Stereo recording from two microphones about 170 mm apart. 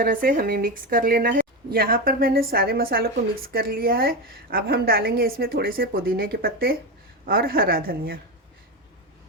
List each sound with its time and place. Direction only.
0.0 s a woman's voice: 55° right (ahead or behind)